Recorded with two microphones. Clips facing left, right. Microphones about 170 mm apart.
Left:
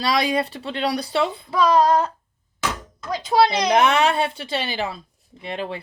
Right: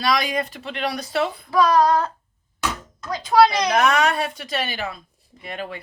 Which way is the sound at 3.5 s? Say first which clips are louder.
Left 1 dB; 25° left (ahead or behind).